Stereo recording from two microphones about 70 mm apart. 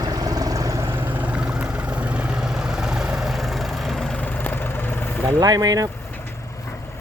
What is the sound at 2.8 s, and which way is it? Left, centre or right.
Vehicle, centre.